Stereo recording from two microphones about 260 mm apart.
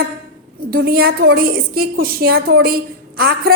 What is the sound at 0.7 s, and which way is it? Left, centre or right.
A woman's voice, right.